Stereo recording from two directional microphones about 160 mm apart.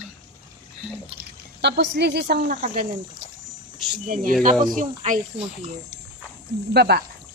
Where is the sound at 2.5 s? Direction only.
50° right (ahead or behind).